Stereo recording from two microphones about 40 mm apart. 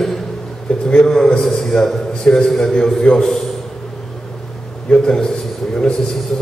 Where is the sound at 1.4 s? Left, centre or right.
Centre.